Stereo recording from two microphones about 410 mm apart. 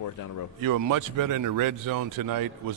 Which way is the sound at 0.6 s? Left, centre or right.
Right.